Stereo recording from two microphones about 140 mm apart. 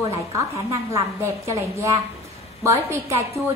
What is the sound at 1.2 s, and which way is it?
A woman's voice, 20° right (ahead or behind).